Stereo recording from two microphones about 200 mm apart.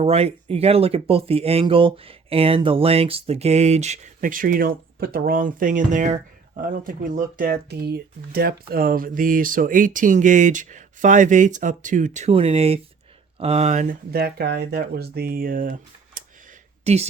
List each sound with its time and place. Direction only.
0.0 s speech: 30° right (ahead or behind)
14.1 s speech: 50° right (ahead or behind)
16.8 s a woman's voice: 30° right (ahead or behind)